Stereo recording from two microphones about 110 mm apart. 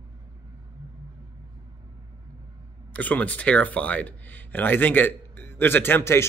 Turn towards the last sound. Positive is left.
turn(degrees=20)  # may be behind; listen again after turning